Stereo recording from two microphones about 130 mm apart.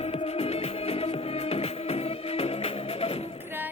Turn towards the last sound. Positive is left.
turn(degrees=50)  # may be behind; listen again after turning